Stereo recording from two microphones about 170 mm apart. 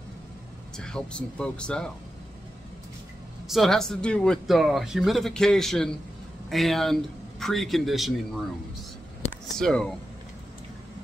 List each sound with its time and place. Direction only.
0.7 s speech: 5° left (ahead or behind)
3.4 s speech: centre (ahead or behind)
9.2 s a sound: 40° left (ahead or behind)
9.6 s speech: 5° left (ahead or behind)